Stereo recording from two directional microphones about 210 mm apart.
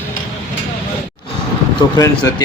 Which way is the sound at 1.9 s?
15° left (ahead or behind).